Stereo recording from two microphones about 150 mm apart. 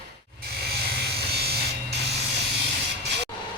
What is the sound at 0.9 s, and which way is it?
Electric shaver, 90° right.